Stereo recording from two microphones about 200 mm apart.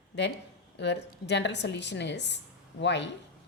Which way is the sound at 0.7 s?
60° left (ahead or behind).